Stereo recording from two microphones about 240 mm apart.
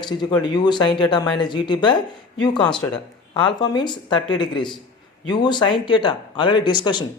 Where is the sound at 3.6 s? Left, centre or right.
Centre.